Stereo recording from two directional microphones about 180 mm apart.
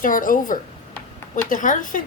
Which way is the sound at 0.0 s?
50° left (ahead or behind).